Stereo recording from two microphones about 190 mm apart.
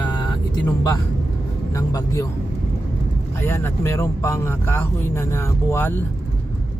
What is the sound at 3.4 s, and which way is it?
Speech, 15° left (ahead or behind).